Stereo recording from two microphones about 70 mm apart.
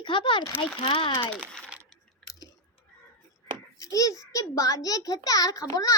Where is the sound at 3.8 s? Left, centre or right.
Left.